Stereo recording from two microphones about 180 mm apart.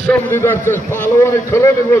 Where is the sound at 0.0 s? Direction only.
10° left (ahead or behind).